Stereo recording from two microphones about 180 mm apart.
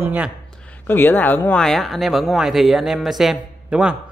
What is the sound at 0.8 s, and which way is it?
Speech, 10° left (ahead or behind).